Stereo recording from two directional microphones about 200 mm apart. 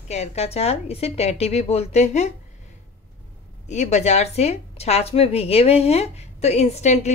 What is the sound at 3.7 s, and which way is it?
A woman's voice, 35° left (ahead or behind).